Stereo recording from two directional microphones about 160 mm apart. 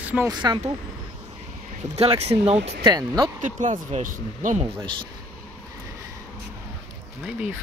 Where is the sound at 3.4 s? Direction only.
50° right (ahead or behind).